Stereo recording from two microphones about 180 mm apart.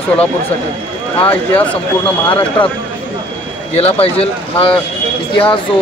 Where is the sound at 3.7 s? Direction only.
35° left (ahead or behind).